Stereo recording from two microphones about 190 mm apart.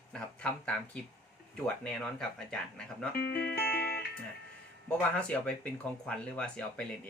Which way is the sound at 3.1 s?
55° left (ahead or behind).